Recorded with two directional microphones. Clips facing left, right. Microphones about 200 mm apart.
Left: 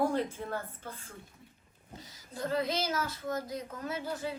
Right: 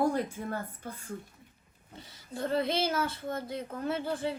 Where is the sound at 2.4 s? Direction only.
25° right (ahead or behind).